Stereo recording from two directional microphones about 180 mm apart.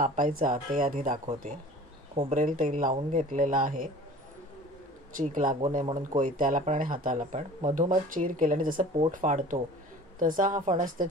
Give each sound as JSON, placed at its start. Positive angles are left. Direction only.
{"t": 0.0, "sound": "speech", "side_deg": -50}
{"t": 5.1, "sound": "speech", "side_deg": -45}